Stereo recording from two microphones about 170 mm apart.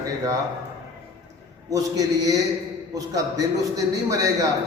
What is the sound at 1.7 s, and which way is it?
A man's voice, 20° right (ahead or behind).